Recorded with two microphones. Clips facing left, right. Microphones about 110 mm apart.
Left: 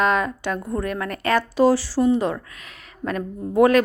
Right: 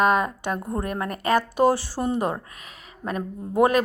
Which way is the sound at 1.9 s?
50° right (ahead or behind).